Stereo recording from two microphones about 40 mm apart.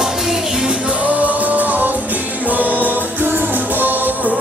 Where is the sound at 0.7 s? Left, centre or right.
Right.